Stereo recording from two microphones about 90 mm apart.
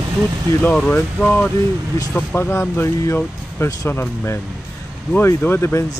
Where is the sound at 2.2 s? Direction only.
25° left (ahead or behind).